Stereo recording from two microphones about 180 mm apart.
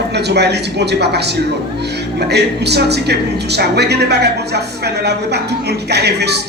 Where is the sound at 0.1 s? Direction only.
70° right (ahead or behind).